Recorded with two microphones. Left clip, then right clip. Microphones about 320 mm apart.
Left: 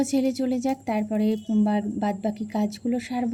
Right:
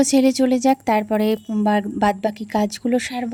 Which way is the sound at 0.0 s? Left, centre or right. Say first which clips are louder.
Right 8 dB; right.